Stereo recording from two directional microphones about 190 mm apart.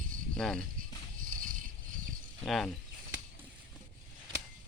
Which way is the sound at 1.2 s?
45° right (ahead or behind).